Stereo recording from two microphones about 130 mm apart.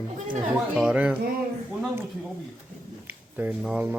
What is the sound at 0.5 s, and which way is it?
Speech, 5° right (ahead or behind).